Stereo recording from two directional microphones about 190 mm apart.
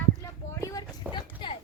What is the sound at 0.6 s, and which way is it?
Speech, 20° left (ahead or behind).